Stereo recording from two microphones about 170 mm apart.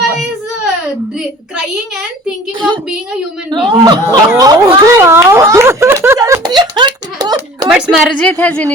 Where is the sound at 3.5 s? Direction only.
25° right (ahead or behind).